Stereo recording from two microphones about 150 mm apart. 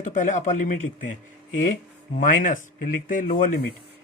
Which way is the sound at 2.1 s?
60° left (ahead or behind).